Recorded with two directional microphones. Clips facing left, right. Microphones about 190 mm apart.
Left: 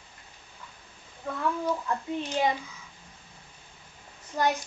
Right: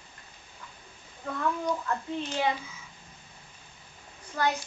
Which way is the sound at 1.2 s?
15° left (ahead or behind).